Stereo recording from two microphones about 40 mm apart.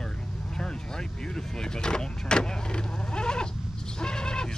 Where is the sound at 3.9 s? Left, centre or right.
Centre.